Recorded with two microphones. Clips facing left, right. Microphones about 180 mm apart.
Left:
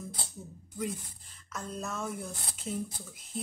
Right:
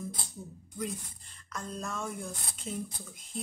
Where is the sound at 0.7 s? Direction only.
5° left (ahead or behind).